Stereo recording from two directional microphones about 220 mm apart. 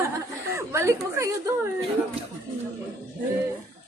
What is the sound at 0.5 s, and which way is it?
Speech, 10° right (ahead or behind).